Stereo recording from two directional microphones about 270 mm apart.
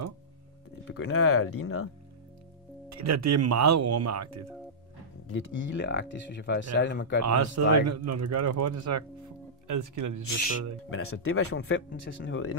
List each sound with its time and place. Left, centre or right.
0.9 s speech: left
2.9 s speech: right
5.3 s speech: left
7.2 s speech: right
9.9 s speech: right
10.9 s speech: left